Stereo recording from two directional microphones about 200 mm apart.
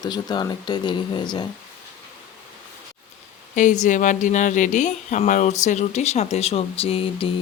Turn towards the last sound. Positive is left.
turn(degrees=25)  # may be behind; listen again after turning